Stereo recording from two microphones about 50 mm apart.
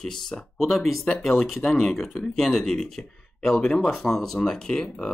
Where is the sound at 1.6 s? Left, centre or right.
Centre.